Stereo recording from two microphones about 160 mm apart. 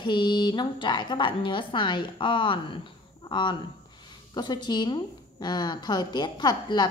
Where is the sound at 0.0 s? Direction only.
30° left (ahead or behind).